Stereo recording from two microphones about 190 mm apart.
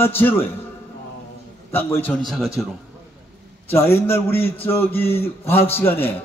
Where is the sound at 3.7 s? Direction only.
10° left (ahead or behind).